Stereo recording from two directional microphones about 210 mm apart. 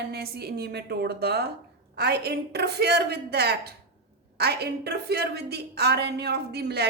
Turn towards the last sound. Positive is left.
turn(degrees=-50)  # may be behind; listen again after turning